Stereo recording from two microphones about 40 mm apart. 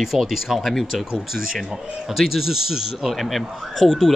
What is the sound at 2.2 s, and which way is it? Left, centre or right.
Speech, centre.